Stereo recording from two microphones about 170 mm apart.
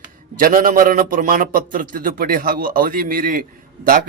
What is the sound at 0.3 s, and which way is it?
A man's voice, 55° right (ahead or behind).